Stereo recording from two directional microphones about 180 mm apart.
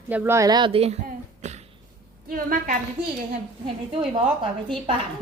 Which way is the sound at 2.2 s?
50° right (ahead or behind).